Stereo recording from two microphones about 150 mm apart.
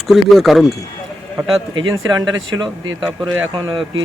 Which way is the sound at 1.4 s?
20° right (ahead or behind).